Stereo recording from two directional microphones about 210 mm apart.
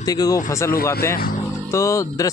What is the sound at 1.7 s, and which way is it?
Speech, 15° left (ahead or behind).